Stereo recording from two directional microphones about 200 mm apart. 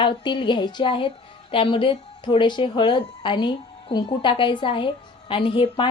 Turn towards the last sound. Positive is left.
turn(degrees=25)  # may be behind; listen again after turning